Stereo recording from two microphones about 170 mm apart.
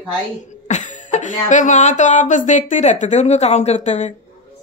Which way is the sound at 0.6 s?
45° left (ahead or behind).